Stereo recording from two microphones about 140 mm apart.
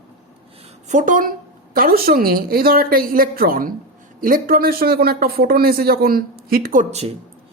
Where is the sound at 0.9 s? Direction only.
70° right (ahead or behind).